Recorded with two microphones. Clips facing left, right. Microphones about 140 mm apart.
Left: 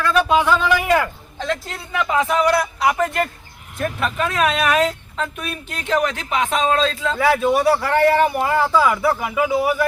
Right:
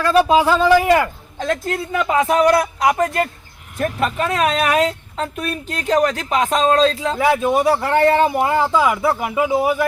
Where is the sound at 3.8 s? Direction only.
35° right (ahead or behind).